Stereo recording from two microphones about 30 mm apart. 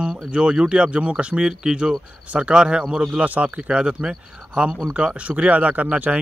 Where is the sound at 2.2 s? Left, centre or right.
Right.